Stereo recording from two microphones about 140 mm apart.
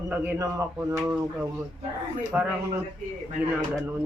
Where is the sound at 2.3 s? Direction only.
10° right (ahead or behind).